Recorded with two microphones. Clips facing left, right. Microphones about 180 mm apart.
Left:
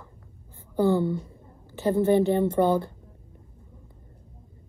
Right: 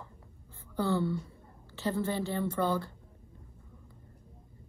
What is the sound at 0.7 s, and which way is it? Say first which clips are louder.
Speech: left 7 dB; 20° left (ahead or behind).